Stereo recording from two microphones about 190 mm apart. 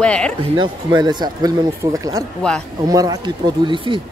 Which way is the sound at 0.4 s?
25° right (ahead or behind).